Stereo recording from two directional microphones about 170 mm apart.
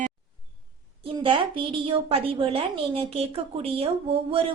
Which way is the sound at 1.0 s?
30° right (ahead or behind).